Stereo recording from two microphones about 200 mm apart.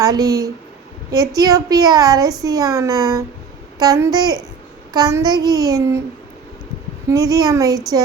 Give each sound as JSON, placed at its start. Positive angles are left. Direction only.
{"t": 0.0, "sound": "speech", "side_deg": -20}
{"t": 4.9, "sound": "child singing", "side_deg": -15}
{"t": 7.1, "sound": "speech", "side_deg": -15}